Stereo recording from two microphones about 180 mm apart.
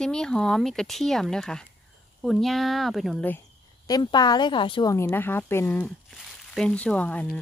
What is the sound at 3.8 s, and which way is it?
A woman's voice, 20° left (ahead or behind).